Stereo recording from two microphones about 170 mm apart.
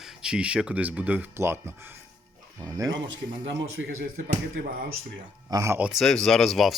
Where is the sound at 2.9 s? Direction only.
90° right.